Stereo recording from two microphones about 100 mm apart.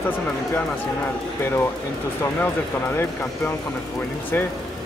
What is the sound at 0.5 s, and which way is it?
Speech, 25° left (ahead or behind).